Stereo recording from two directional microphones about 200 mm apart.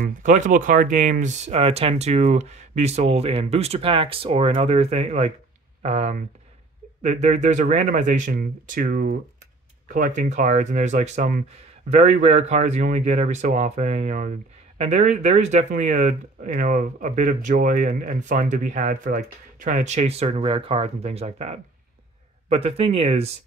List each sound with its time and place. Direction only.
0.0 s speech: 40° right (ahead or behind)